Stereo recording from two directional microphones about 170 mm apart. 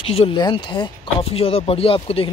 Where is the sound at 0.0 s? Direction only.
35° left (ahead or behind).